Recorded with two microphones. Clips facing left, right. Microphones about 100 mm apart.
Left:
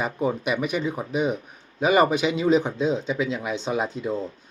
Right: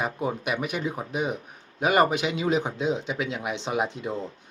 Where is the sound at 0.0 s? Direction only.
10° right (ahead or behind).